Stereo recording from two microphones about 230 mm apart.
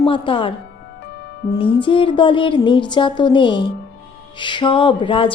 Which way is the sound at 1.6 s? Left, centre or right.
Left.